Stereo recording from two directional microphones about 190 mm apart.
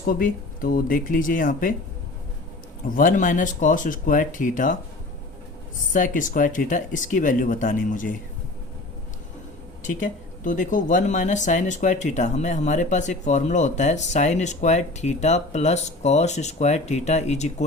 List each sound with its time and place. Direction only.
0.0 s speech: 50° left (ahead or behind)
2.9 s speech: 45° left (ahead or behind)
5.9 s speech: 45° left (ahead or behind)
9.8 s speech: 40° left (ahead or behind)